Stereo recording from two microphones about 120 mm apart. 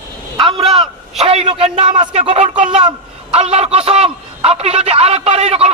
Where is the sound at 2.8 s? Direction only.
60° right (ahead or behind).